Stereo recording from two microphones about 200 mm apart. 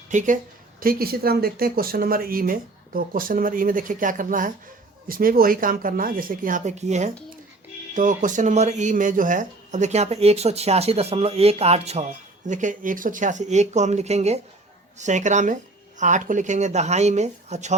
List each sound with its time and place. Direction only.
0.1 s a woman's voice: 40° right (ahead or behind)